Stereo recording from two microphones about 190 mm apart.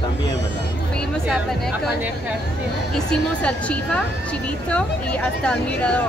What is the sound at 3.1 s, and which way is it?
Speech, 5° left (ahead or behind).